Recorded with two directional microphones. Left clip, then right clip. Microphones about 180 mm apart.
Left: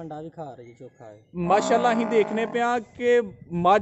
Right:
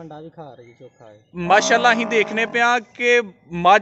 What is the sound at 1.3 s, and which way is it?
A man's voice, 5° left (ahead or behind).